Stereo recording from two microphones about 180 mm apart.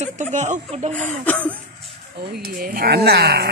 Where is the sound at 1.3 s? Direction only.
10° left (ahead or behind).